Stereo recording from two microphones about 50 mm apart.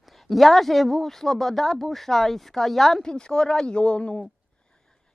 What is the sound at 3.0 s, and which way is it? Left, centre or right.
Speech, centre.